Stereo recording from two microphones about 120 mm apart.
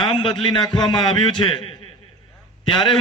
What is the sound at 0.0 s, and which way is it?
A man's voice, 50° left (ahead or behind).